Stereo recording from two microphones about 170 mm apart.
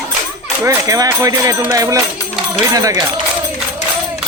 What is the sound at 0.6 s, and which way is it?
Speech, 20° right (ahead or behind).